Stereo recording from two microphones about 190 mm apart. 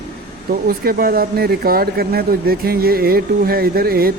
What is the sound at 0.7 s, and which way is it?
Speech, 50° right (ahead or behind).